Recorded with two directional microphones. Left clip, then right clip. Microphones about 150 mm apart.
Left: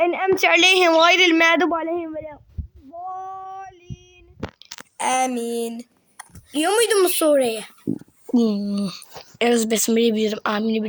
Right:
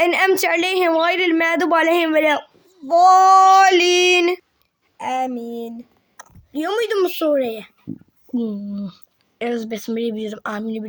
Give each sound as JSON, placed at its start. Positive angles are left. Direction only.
{"t": 0.0, "sound": "a woman's voice", "side_deg": -25}
{"t": 1.0, "sound": "female singing", "side_deg": -15}
{"t": 4.9, "sound": "a woman's voice", "side_deg": 0}
{"t": 8.4, "sound": "speech", "side_deg": 15}